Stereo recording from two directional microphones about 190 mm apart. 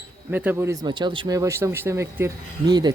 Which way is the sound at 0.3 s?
10° right (ahead or behind).